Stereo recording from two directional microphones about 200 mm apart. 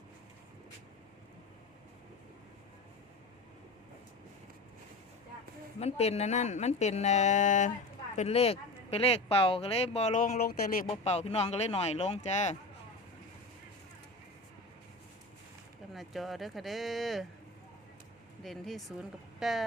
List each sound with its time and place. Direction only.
5.8 s speech: 30° left (ahead or behind)
10.8 s speech: 30° left (ahead or behind)
15.9 s speech: centre (ahead or behind)
18.4 s speech: centre (ahead or behind)